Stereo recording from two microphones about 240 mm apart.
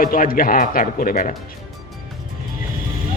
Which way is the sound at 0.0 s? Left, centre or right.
Left.